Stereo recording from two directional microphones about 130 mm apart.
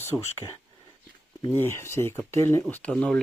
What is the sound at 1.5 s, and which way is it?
Speech, 20° left (ahead or behind).